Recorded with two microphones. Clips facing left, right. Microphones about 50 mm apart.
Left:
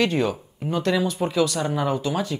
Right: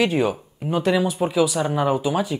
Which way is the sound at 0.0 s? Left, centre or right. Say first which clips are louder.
Right 2 dB; centre.